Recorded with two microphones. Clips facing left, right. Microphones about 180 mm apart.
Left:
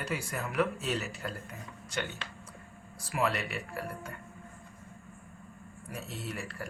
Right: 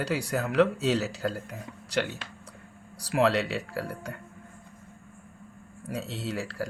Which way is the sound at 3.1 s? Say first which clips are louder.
Right 7 dB; 90° right.